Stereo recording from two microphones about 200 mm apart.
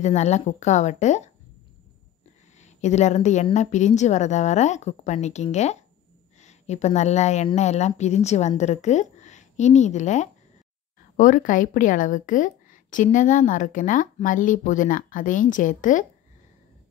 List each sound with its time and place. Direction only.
0.0 s a woman's voice: 35° left (ahead or behind)
2.6 s a woman's voice: 35° left (ahead or behind)